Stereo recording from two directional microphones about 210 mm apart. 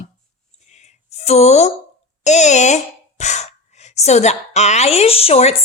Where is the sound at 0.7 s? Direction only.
35° left (ahead or behind).